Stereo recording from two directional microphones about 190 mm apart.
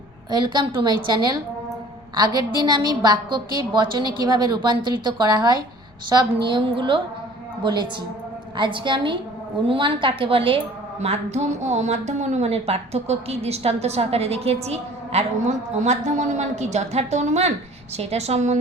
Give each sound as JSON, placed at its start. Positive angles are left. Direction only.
{"t": 0.3, "sound": "a woman's voice", "side_deg": -25}